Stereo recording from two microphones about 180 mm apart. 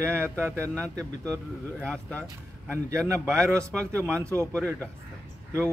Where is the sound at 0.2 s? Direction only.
15° right (ahead or behind).